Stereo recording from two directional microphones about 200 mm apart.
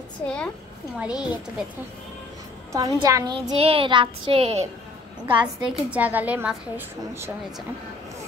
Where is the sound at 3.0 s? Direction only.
20° right (ahead or behind).